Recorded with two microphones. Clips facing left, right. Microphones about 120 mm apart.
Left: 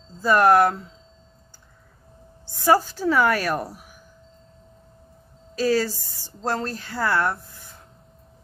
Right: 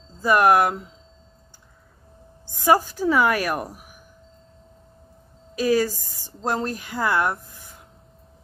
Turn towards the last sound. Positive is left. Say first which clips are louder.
# even
turn(degrees=-15)  # may be behind; listen again after turning